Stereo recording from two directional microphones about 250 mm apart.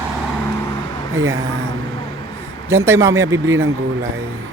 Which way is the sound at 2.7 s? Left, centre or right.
Centre.